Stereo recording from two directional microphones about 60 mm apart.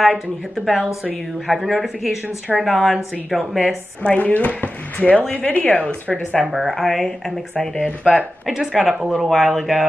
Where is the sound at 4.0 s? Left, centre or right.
Left.